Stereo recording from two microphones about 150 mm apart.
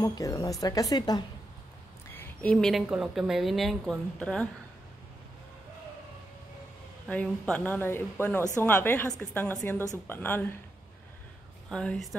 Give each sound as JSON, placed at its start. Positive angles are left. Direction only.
{"t": 0.0, "sound": "speech", "side_deg": 25}
{"t": 2.1, "sound": "speech", "side_deg": 5}
{"t": 7.1, "sound": "speech", "side_deg": 10}
{"t": 11.7, "sound": "speech", "side_deg": 5}